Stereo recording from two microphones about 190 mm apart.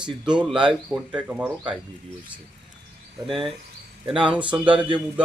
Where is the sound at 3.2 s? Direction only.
Centre (ahead or behind).